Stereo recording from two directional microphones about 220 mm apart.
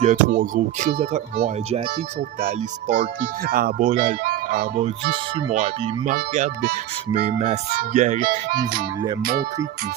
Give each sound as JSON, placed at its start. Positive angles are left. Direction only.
{"t": 0.0, "sound": "speech", "side_deg": -35}